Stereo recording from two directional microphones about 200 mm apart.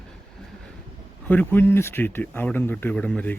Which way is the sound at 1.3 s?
10° left (ahead or behind).